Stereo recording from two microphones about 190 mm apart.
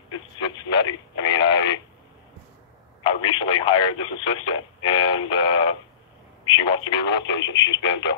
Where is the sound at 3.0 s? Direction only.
25° left (ahead or behind).